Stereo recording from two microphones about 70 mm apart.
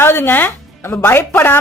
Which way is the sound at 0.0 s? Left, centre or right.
Left.